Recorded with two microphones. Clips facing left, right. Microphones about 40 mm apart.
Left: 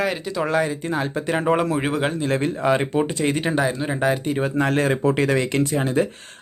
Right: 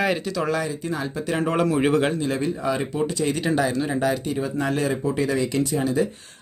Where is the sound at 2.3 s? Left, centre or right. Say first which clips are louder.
Left 4 dB; left.